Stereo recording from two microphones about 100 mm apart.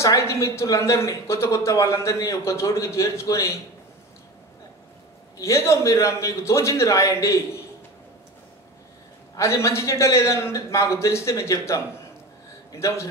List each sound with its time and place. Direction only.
0.0 s a man's voice: 30° left (ahead or behind)
5.4 s a man's voice: 30° left (ahead or behind)
9.4 s a man's voice: 30° left (ahead or behind)